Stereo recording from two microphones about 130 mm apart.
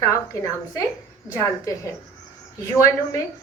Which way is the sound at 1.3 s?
25° left (ahead or behind).